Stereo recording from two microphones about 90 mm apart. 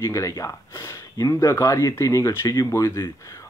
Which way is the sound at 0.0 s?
35° left (ahead or behind).